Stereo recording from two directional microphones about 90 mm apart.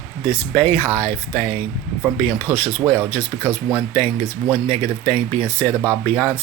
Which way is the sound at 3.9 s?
20° left (ahead or behind).